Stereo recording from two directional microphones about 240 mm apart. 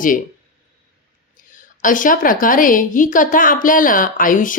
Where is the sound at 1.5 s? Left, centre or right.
Left.